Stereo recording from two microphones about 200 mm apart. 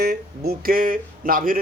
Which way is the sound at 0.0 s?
50° right (ahead or behind).